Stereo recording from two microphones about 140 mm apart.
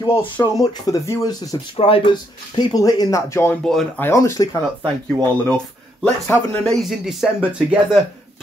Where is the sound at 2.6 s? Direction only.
25° left (ahead or behind).